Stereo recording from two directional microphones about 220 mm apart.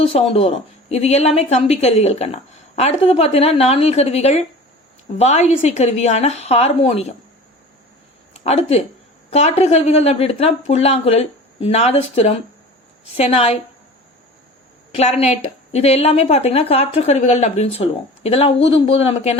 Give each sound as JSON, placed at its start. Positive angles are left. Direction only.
{"t": 0.0, "sound": "a woman's voice", "side_deg": 25}
{"t": 8.3, "sound": "a woman's voice", "side_deg": 30}
{"t": 14.9, "sound": "a woman's voice", "side_deg": 30}